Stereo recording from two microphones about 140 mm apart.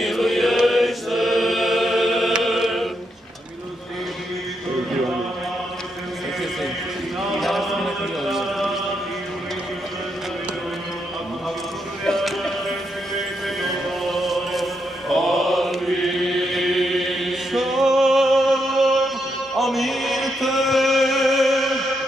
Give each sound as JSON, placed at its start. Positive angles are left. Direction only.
{"t": 0.0, "sound": "chant", "side_deg": 0}
{"t": 7.3, "sound": "chant", "side_deg": 0}
{"t": 12.0, "sound": "music", "side_deg": 0}